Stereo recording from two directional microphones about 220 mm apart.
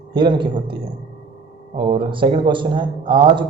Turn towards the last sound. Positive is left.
turn(degrees=-20)  # may be behind; listen again after turning